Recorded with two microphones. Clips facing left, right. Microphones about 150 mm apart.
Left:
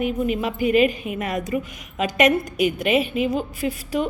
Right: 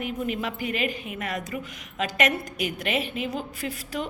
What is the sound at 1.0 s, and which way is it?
Speech, 15° left (ahead or behind).